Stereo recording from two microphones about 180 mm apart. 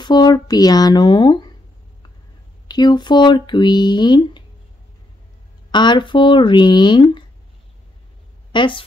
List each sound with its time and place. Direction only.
0.0 s speech: 25° left (ahead or behind)
2.7 s speech: 25° left (ahead or behind)
5.7 s speech: 25° left (ahead or behind)
8.5 s a woman's voice: 25° left (ahead or behind)